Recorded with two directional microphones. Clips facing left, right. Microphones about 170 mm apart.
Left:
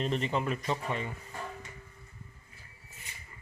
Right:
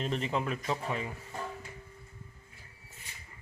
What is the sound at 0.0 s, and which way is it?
Speech, centre (ahead or behind).